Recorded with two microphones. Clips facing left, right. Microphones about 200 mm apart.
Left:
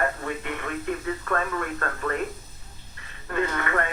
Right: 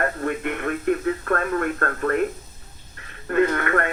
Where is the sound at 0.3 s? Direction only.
55° right (ahead or behind).